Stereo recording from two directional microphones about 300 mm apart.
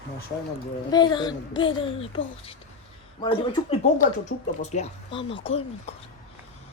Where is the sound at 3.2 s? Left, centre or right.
Centre.